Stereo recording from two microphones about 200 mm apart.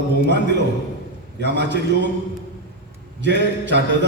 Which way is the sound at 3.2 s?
60° right (ahead or behind).